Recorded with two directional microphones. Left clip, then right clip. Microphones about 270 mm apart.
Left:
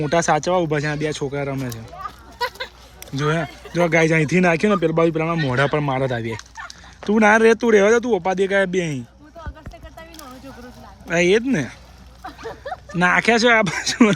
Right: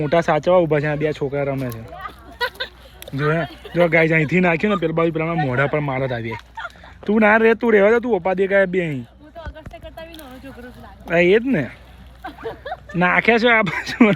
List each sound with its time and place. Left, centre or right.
0.0 s speech: centre
2.0 s a sound: centre
3.1 s speech: centre
6.6 s fowl: centre
7.2 s speech: centre
11.1 s speech: centre
12.2 s a sound: centre
13.0 s speech: centre